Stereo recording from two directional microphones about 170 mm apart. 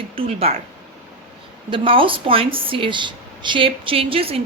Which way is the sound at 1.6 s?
30° right (ahead or behind).